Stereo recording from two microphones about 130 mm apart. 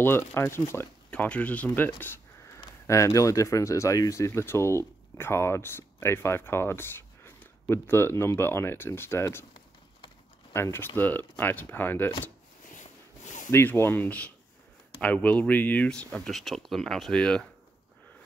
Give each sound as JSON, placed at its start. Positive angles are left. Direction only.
{"t": 0.0, "sound": "speech", "side_deg": 20}
{"t": 10.5, "sound": "speech", "side_deg": 20}
{"t": 12.8, "sound": "a sound", "side_deg": 70}
{"t": 13.5, "sound": "speech", "side_deg": 20}